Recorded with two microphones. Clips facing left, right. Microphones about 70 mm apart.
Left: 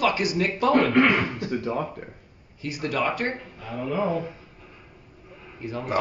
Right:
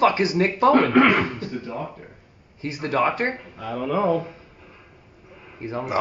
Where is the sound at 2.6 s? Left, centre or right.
Right.